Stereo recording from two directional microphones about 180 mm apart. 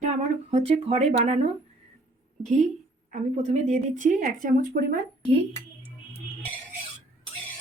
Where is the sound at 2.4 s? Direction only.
40° right (ahead or behind).